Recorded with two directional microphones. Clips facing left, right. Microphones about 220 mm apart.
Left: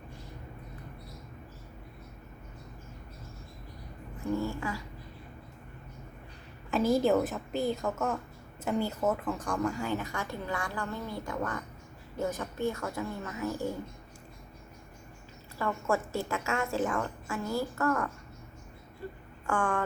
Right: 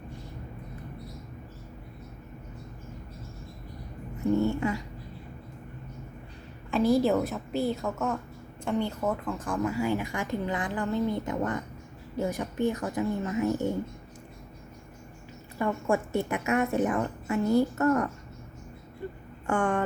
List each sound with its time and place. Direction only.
4.3 s a woman's voice: 25° right (ahead or behind)
6.7 s a woman's voice: centre (ahead or behind); by 13.7 s 20° right (ahead or behind)
15.5 s a woman's voice: 15° right (ahead or behind)
19.5 s a woman's voice: 20° right (ahead or behind)